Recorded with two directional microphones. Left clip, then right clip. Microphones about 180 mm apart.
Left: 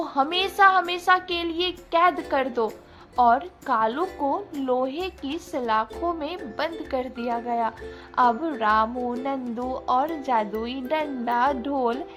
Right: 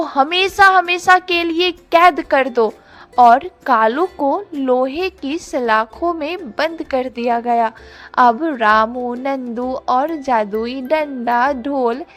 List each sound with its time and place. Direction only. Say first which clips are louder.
0.0 s a woman's voice: right 8 dB; 40° right (ahead or behind)